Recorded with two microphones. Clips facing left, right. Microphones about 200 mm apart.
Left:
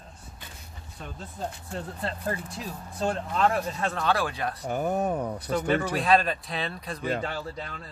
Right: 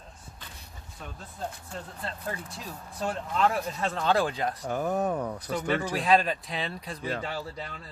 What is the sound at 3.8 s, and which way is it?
Speech, 20° right (ahead or behind).